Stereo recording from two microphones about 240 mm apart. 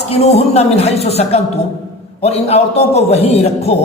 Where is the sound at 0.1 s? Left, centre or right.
Left.